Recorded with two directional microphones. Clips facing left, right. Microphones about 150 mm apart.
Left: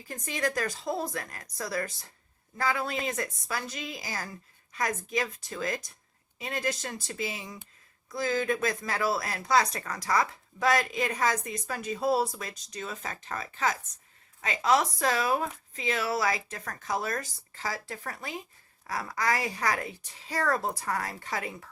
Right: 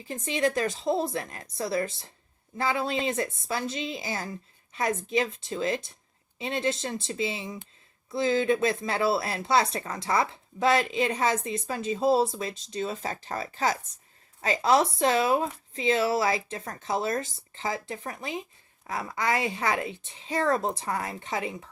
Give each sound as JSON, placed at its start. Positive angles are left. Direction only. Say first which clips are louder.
{"t": 0.0, "sound": "a woman's voice", "louder": "right 5 dB", "side_deg": -25}